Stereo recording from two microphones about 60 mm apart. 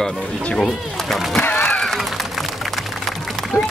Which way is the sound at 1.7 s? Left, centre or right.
Centre.